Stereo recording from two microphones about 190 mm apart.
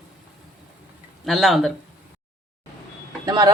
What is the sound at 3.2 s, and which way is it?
Speech, 20° right (ahead or behind).